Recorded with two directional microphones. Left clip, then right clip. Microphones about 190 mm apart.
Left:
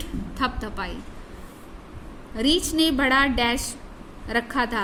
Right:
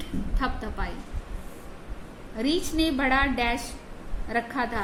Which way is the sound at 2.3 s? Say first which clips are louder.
Left 5 dB; 55° left (ahead or behind).